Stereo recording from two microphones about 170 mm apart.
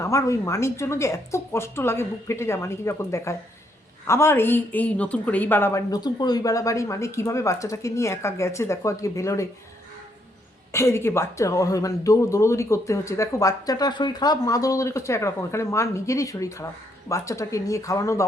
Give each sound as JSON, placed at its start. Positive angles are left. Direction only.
{"t": 0.0, "sound": "speech", "side_deg": 15}
{"t": 10.7, "sound": "speech", "side_deg": 15}